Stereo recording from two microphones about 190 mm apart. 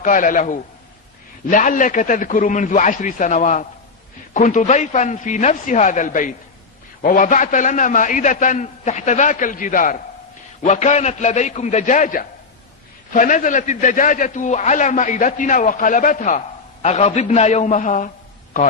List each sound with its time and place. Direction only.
0.0 s a man's voice: 45° left (ahead or behind)